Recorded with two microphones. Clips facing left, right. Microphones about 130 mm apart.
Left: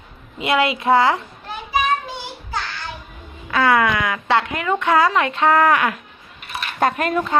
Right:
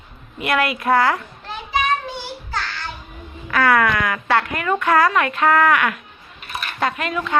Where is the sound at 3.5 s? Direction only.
20° left (ahead or behind).